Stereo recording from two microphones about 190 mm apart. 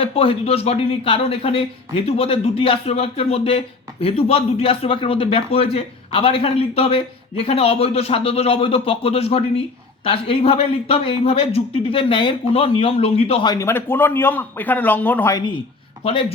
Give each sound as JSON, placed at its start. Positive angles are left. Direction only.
{"t": 0.0, "sound": "speech", "side_deg": 30}